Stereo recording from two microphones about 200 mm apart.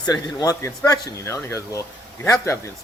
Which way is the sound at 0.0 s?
20° left (ahead or behind).